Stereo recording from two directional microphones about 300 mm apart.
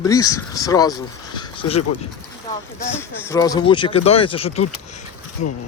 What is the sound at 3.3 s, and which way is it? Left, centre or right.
Speech, centre.